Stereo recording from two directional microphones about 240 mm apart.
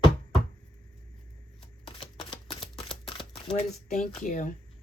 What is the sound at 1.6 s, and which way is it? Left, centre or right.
Camera, left.